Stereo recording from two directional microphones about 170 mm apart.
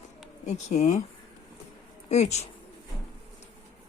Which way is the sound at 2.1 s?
40° left (ahead or behind).